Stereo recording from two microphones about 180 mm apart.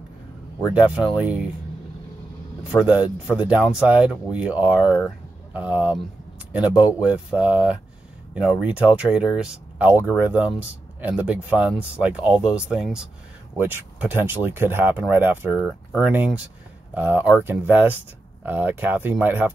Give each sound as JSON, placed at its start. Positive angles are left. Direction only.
{"t": 0.7, "sound": "speech", "side_deg": -5}
{"t": 2.8, "sound": "speech", "side_deg": -10}